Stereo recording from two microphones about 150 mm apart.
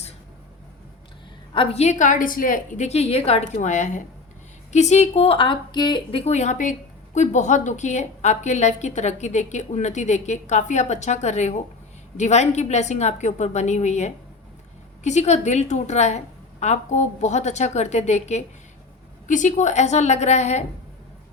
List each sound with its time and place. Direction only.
1.5 s speech: 45° left (ahead or behind)